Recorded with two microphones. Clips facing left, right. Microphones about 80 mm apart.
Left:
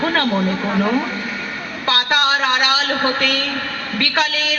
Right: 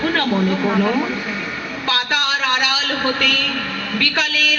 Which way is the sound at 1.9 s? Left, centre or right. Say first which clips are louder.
Left 3 dB; left.